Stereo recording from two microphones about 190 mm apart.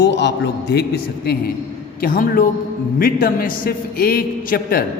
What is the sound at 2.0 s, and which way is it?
A man's voice, 50° left (ahead or behind).